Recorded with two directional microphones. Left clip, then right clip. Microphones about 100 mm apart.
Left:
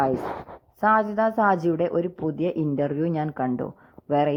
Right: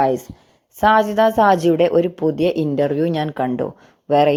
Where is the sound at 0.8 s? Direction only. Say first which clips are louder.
Right 7 dB; 40° right (ahead or behind).